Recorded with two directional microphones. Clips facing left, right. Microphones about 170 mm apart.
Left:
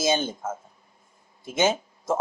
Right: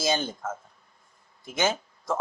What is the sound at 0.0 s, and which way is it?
Speech, 20° left (ahead or behind).